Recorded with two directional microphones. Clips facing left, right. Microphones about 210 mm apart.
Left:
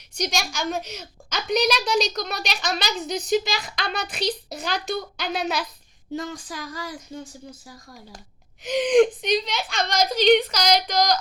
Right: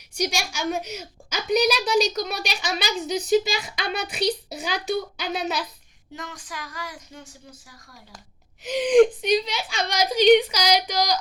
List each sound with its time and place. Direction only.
0.1 s a woman's voice: 10° right (ahead or behind)
6.1 s speech: 30° left (ahead or behind)
8.6 s a woman's voice: 5° right (ahead or behind)